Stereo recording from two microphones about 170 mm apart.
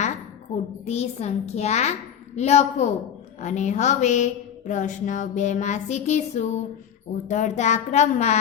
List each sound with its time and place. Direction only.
0.9 s a child's voice: 40° left (ahead or behind)